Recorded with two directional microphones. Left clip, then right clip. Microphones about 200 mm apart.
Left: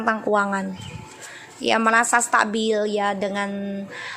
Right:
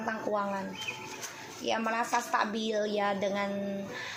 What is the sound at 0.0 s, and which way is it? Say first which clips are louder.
Speech: left 11 dB; 35° left (ahead or behind).